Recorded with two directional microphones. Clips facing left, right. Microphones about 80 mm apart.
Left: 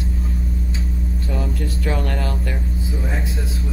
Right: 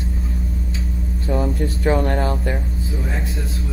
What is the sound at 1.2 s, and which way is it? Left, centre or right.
Speech, right.